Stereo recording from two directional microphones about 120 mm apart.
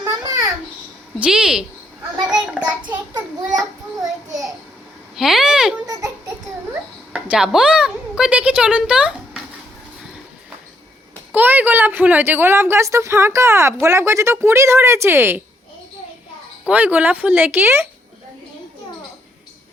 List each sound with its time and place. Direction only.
0.0 s babbling: 30° right (ahead or behind)
1.2 s a child's voice: 5° right (ahead or behind)
5.1 s speech: 5° right (ahead or behind)
5.8 s a sound: 30° right (ahead or behind)
7.1 s a woman's voice: 10° right (ahead or behind)
11.3 s speech: 15° right (ahead or behind)
16.6 s speech: 15° right (ahead or behind)